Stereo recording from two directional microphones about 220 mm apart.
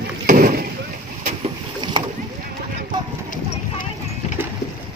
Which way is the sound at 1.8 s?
20° right (ahead or behind).